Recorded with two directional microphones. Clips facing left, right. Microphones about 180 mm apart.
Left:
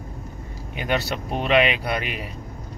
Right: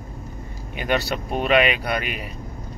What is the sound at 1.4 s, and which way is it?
Speech, 25° left (ahead or behind).